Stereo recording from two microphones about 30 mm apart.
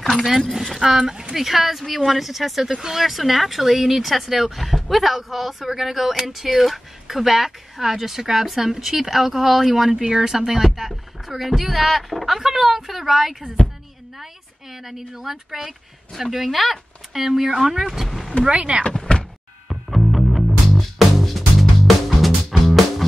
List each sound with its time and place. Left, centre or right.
0.2 s speech: centre
3.0 s speech: centre
9.8 s speech: right
13.6 s a sound: left
14.2 s speech: centre
17.8 s speech: centre
18.5 s speech: right
19.1 s thunk: left
19.7 s music: centre